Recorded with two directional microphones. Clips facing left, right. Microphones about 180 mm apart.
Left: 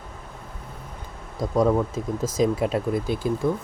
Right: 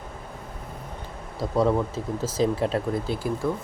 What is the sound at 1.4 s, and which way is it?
Speech, 15° left (ahead or behind).